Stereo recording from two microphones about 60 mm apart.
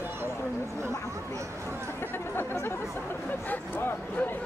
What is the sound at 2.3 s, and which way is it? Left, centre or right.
Chatter, left.